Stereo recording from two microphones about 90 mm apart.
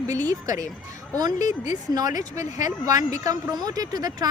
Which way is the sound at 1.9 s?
45° right (ahead or behind).